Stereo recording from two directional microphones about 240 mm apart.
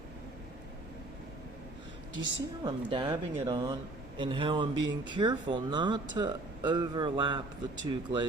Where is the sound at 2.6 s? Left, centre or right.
Centre.